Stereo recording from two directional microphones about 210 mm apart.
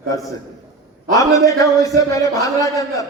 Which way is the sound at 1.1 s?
15° left (ahead or behind).